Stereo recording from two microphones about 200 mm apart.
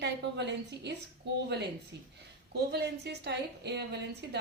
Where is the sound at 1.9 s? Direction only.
55° right (ahead or behind).